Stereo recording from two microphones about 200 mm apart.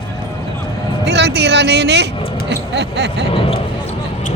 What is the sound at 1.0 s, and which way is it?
Speech, 55° right (ahead or behind).